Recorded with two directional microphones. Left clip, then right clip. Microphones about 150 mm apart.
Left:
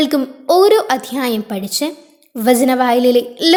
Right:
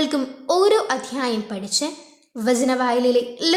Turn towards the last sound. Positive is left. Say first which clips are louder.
# left 6 dB
turn(degrees=40)  # may be behind; listen again after turning